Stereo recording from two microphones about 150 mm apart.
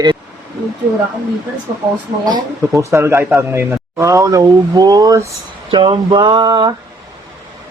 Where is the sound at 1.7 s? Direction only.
30° right (ahead or behind).